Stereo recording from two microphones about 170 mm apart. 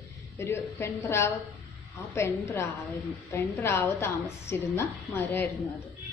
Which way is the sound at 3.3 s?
15° left (ahead or behind).